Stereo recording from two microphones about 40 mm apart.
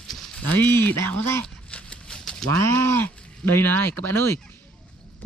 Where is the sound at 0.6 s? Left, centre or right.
Left.